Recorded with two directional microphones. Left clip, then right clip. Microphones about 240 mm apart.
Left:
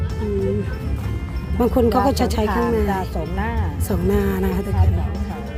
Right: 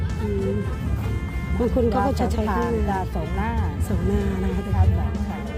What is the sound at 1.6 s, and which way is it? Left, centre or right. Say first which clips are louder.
Speech: left 4 dB; left.